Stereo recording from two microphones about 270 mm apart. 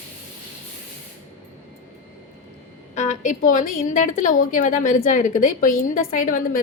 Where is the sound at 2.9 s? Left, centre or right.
Left.